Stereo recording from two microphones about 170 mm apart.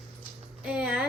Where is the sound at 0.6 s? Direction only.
5° right (ahead or behind).